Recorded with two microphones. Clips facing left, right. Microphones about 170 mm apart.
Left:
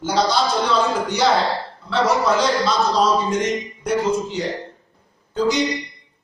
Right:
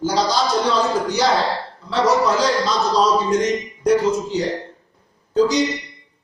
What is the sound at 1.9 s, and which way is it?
A man's voice, 35° right (ahead or behind).